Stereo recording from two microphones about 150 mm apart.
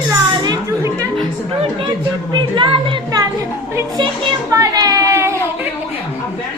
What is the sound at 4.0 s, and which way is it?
Music, 25° right (ahead or behind).